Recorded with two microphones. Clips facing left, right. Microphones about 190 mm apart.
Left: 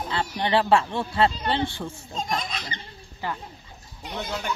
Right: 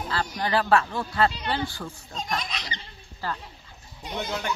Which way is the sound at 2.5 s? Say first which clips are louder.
Left 2 dB; 50° left (ahead or behind).